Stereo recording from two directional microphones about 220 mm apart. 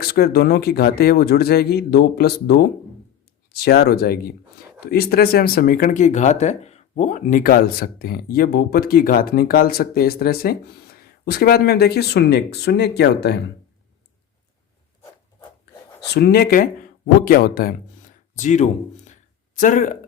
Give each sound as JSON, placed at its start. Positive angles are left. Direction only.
{"t": 0.0, "sound": "speech", "side_deg": 45}
{"t": 16.1, "sound": "speech", "side_deg": 45}